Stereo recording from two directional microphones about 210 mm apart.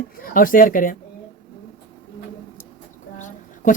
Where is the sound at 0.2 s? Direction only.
40° left (ahead or behind).